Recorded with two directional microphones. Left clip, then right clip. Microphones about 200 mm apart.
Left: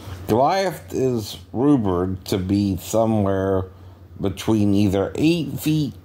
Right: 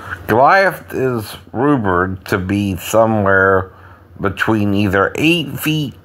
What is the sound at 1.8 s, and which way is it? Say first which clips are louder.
Speech: right 7 dB; 25° right (ahead or behind).